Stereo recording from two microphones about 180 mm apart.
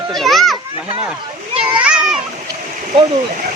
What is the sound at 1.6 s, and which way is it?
Splash, 5° right (ahead or behind).